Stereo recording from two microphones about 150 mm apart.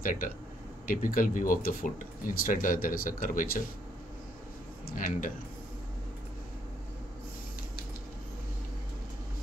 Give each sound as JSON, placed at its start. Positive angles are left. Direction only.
{"t": 0.0, "sound": "speech", "side_deg": 65}
{"t": 4.8, "sound": "speech", "side_deg": 60}